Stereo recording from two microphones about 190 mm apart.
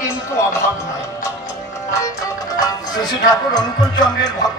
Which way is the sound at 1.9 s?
15° left (ahead or behind).